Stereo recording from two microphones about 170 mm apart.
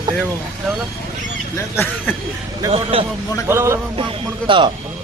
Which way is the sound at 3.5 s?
15° right (ahead or behind).